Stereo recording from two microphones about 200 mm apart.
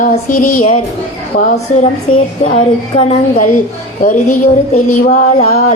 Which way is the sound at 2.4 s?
30° left (ahead or behind).